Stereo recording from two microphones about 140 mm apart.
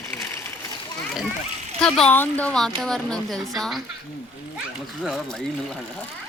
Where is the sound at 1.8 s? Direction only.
5° left (ahead or behind).